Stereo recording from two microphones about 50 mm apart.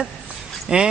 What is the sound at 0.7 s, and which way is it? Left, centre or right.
Speech, centre.